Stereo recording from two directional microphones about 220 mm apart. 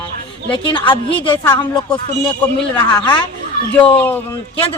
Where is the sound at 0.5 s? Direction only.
20° left (ahead or behind).